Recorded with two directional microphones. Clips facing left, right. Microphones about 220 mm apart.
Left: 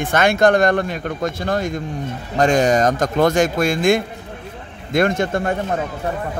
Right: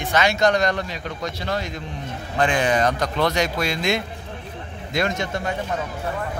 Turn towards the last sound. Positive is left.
turn(degrees=50)  # may be behind; listen again after turning